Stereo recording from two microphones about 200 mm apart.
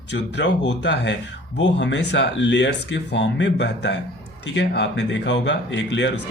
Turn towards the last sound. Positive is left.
turn(degrees=65)  # may be behind; listen again after turning